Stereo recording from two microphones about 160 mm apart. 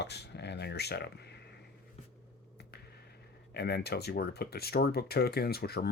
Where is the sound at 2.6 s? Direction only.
90° left.